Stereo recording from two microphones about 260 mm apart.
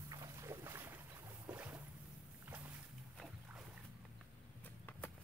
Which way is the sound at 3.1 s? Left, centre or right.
Centre.